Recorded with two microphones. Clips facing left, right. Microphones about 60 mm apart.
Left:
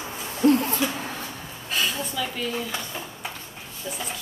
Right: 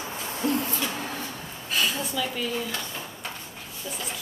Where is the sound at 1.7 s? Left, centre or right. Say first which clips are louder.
Even; centre.